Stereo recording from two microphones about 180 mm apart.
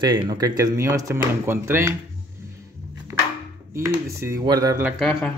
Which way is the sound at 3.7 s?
15° right (ahead or behind).